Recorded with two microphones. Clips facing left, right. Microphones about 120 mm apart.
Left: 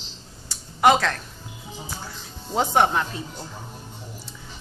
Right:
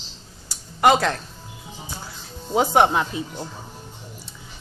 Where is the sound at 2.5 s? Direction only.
15° right (ahead or behind).